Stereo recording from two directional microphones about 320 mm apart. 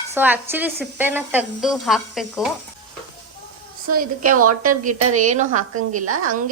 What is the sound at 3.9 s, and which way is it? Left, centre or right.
A woman's voice, right.